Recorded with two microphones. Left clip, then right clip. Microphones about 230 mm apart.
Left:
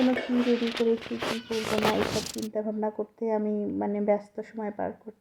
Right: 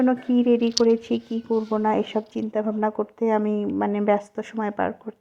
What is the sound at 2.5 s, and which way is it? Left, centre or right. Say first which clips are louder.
Speech: right 7 dB; centre.